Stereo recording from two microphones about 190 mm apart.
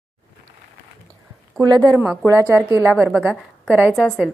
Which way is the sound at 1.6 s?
20° right (ahead or behind).